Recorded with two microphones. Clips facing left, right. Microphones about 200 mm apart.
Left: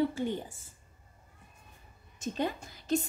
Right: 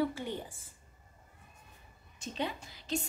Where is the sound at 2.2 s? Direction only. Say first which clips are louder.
Left 4 dB; 45° left (ahead or behind).